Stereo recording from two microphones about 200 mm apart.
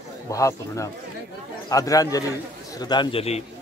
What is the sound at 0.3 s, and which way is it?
A man's voice, 15° left (ahead or behind).